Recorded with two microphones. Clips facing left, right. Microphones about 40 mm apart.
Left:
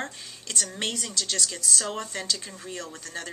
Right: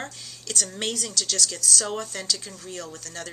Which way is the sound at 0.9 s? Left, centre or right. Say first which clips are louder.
Right 2 dB; centre.